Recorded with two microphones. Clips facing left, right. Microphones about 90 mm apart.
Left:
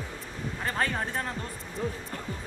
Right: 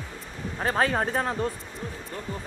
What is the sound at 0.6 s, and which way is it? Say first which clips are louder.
Speech: right 6 dB; 40° right (ahead or behind).